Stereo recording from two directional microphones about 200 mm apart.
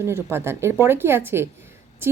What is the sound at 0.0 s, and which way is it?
A woman's voice, 10° right (ahead or behind).